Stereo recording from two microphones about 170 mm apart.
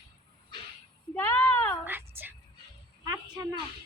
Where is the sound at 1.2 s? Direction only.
10° left (ahead or behind).